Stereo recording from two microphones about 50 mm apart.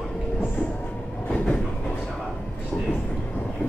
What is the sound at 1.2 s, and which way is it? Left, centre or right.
Train, centre.